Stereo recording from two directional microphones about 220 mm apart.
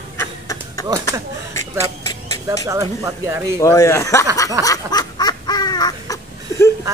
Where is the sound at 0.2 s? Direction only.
15° left (ahead or behind).